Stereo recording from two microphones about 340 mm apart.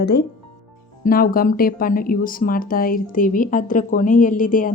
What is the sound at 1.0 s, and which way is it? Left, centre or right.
Speech, left.